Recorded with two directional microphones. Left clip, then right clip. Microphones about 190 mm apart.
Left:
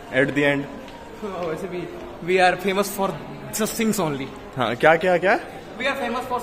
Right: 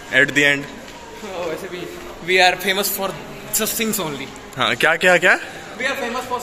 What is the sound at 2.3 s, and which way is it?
A man's voice, 55° left (ahead or behind).